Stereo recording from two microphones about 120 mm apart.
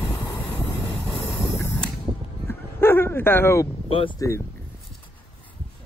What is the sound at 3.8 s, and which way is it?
Speech, 50° left (ahead or behind).